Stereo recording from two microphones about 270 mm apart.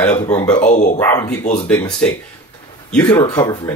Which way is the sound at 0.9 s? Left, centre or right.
Centre.